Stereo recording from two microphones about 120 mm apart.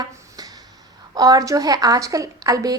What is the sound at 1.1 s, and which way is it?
A woman's voice, 30° right (ahead or behind).